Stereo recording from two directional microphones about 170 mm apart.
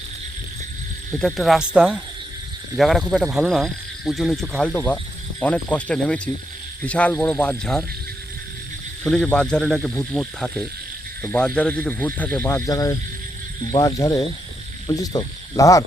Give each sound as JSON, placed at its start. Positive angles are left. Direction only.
{"t": 1.2, "sound": "speech", "side_deg": 0}
{"t": 9.0, "sound": "speech", "side_deg": 5}
{"t": 14.8, "sound": "cricket", "side_deg": 20}